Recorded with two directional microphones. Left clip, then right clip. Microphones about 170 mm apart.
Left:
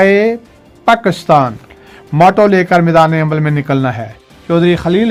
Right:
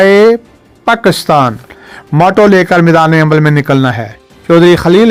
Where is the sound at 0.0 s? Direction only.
35° right (ahead or behind).